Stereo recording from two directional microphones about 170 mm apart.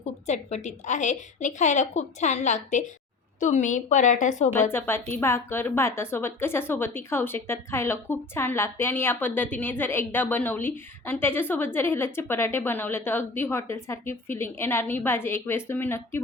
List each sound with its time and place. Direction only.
0.3 s a woman's voice: 45° left (ahead or behind)
4.7 s a woman's voice: 15° left (ahead or behind)